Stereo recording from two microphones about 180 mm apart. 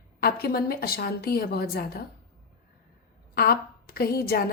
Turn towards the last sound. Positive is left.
turn(degrees=60)  # may be behind; listen again after turning